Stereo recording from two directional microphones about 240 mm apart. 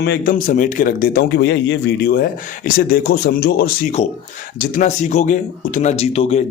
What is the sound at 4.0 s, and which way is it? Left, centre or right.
A man's voice, left.